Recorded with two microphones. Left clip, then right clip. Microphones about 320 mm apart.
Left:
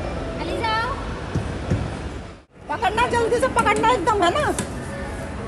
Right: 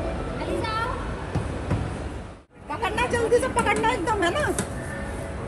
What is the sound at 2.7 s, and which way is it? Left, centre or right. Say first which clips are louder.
Speech: left 5 dB; left.